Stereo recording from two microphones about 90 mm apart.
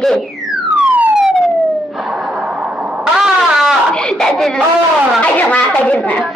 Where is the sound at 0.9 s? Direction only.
20° right (ahead or behind).